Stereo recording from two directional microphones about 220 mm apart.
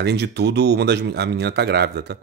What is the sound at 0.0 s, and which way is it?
Speech, 50° right (ahead or behind).